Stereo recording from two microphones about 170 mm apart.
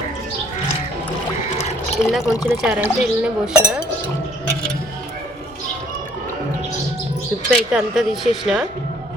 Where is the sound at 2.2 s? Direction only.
20° left (ahead or behind).